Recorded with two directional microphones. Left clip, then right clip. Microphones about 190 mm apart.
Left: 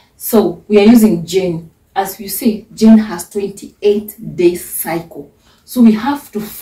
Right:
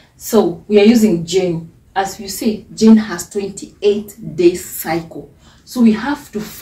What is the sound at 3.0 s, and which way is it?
A woman's voice, 20° right (ahead or behind).